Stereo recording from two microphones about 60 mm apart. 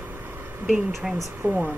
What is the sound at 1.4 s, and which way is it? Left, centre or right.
Speech, right.